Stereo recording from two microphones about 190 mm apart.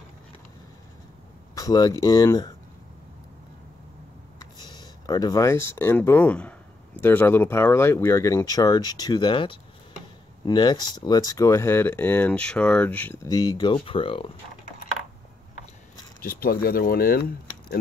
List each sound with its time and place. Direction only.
1.5 s speech: 20° left (ahead or behind)
4.4 s speech: 20° left (ahead or behind)
16.2 s speech: 50° left (ahead or behind)